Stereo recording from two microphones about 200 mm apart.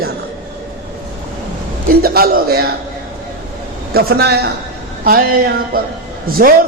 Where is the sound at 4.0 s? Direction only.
50° right (ahead or behind).